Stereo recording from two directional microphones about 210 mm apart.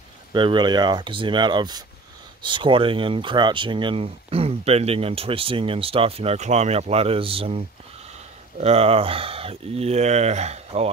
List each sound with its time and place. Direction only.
0.3 s speech: 20° right (ahead or behind)